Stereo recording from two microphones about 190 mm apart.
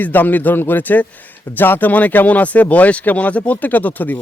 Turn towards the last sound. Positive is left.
turn(degrees=10)  # may be behind; listen again after turning